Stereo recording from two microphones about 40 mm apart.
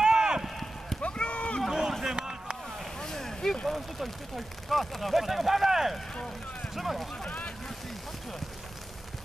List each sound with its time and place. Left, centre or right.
0.0 s run: centre
1.0 s a sound: left
1.7 s run: centre
2.1 s boat: right
3.0 s vehicle: centre
3.6 s speech: centre
7.2 s boat: left